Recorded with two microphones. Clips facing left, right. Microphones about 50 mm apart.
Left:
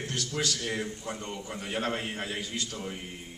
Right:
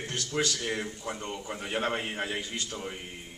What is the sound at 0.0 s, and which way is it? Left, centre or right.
A man's voice, right.